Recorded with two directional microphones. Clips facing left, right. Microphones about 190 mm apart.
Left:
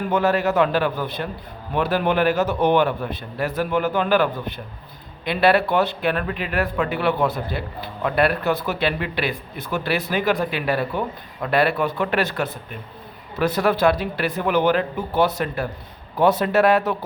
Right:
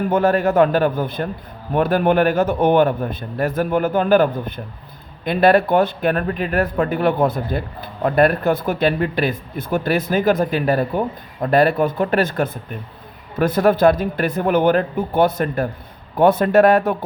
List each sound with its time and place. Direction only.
0.1 s speech: 50° right (ahead or behind)